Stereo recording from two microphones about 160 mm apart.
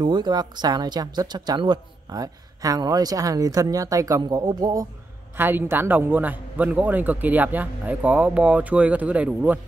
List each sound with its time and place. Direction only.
0.0 s a man's voice: 30° right (ahead or behind); by 9.6 s 10° right (ahead or behind)